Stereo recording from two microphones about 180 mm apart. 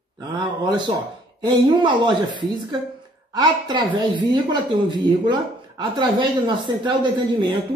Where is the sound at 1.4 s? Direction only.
25° right (ahead or behind).